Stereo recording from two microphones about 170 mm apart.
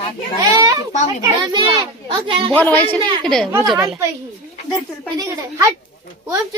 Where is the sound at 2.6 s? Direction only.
10° left (ahead or behind).